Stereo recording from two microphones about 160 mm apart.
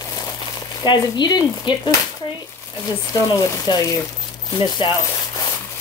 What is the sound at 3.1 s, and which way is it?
Speech, 25° left (ahead or behind).